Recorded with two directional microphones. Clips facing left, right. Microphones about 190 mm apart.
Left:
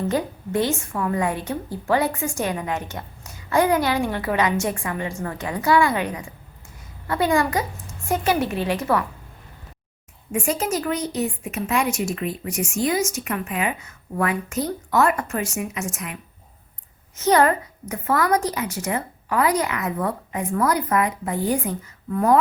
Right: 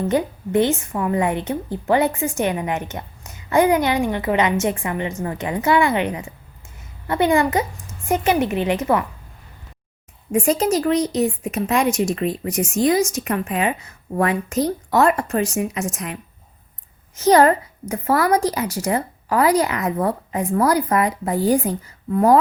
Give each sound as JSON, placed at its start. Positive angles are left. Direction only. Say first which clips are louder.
{"t": 0.1, "sound": "a woman's voice", "louder": "right 4 dB", "side_deg": -20}
{"t": 10.3, "sound": "a woman's voice", "louder": "right 6 dB", "side_deg": -35}
{"t": 17.2, "sound": "a woman's voice", "louder": "right 4 dB", "side_deg": -30}